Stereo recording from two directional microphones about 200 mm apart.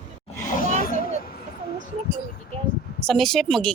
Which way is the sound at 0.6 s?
45° left (ahead or behind).